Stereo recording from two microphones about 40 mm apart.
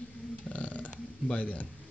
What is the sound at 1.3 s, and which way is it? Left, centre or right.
Speech, left.